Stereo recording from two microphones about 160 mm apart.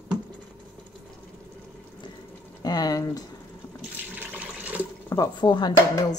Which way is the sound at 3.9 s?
10° right (ahead or behind).